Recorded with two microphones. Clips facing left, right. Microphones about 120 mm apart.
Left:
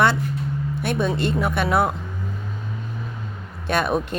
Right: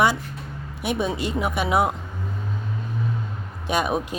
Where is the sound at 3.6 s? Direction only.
15° right (ahead or behind).